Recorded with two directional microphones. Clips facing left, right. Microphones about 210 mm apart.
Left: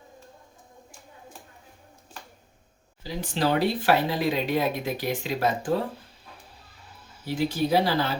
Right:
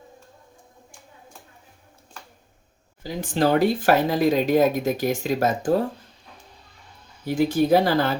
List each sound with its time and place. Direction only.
3.0 s speech: 50° right (ahead or behind)
7.3 s speech: 50° right (ahead or behind)